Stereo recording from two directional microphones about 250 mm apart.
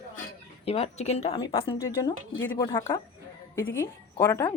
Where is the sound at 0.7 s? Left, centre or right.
Left.